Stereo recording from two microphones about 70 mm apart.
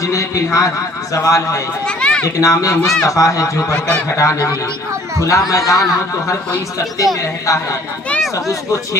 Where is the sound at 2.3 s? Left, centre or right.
Left.